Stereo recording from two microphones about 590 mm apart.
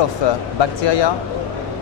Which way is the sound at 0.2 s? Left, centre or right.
Left.